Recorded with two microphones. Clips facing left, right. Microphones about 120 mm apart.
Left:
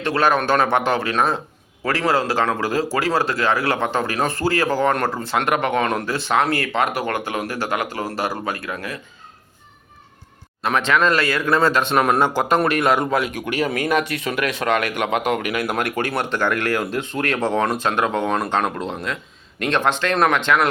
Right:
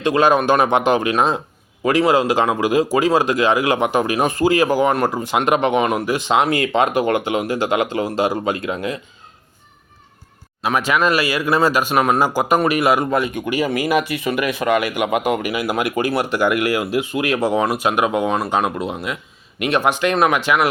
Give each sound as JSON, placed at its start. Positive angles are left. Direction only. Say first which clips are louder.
{"t": 0.0, "sound": "speech", "louder": "right 4 dB", "side_deg": -15}
{"t": 10.6, "sound": "speech", "louder": "right 1 dB", "side_deg": -5}